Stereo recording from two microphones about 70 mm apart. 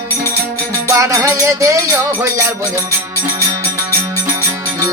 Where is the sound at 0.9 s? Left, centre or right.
Right.